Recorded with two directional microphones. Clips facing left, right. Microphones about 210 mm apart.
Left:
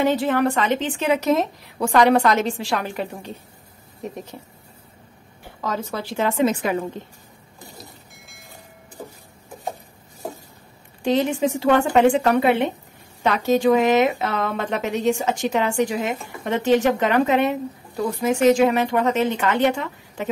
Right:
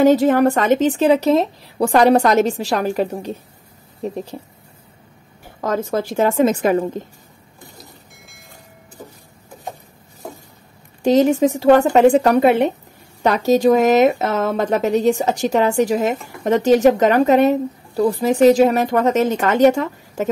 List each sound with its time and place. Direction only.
0.0 s speech: 40° right (ahead or behind)
5.6 s a woman's voice: 45° right (ahead or behind)
11.0 s speech: 40° right (ahead or behind)